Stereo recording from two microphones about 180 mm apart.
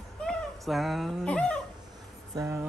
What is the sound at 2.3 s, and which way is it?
Speech, 15° right (ahead or behind).